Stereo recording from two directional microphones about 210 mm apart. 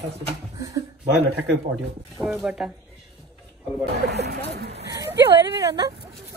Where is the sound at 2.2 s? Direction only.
5° right (ahead or behind).